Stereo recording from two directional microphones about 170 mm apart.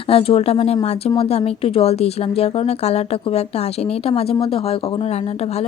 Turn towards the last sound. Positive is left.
turn(degrees=35)  # may be behind; listen again after turning